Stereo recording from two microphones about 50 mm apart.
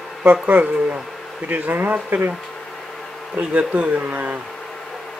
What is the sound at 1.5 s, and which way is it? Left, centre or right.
Speech, right.